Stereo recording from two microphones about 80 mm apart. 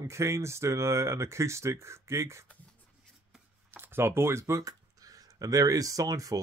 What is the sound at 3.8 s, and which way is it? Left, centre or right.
Speech, right.